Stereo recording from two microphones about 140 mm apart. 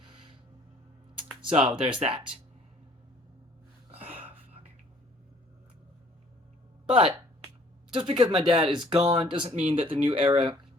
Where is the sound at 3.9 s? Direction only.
40° right (ahead or behind).